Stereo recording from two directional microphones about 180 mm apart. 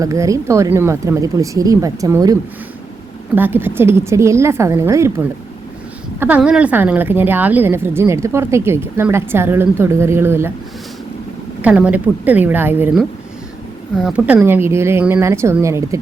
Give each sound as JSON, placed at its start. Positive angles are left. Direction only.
{"t": 0.0, "sound": "a woman's voice", "side_deg": -20}
{"t": 6.1, "sound": "a woman's voice", "side_deg": -10}
{"t": 11.6, "sound": "a woman's voice", "side_deg": -10}